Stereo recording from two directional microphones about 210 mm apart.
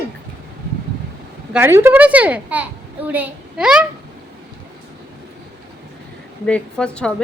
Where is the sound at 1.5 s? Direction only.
10° right (ahead or behind).